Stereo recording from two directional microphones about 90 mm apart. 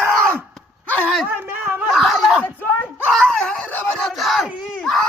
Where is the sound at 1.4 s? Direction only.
20° right (ahead or behind).